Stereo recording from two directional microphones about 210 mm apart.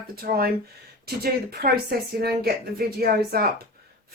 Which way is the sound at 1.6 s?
45° right (ahead or behind).